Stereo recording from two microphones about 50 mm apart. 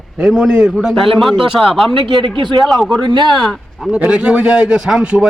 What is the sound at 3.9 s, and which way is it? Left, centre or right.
A man's voice, right.